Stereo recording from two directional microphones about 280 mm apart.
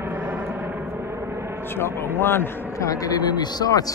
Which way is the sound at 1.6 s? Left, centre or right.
Centre.